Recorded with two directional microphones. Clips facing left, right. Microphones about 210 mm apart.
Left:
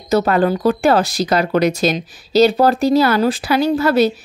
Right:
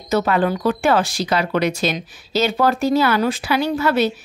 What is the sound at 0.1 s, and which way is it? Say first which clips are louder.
Speech: left 3 dB; 40° left (ahead or behind).